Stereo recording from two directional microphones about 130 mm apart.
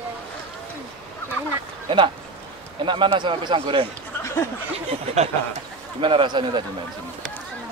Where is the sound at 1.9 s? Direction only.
40° right (ahead or behind).